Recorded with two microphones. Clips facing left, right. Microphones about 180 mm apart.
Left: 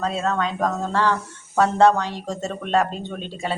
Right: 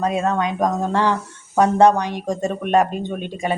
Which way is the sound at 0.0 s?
15° right (ahead or behind).